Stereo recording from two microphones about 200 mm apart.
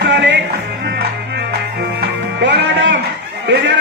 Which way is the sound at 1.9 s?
60° right (ahead or behind).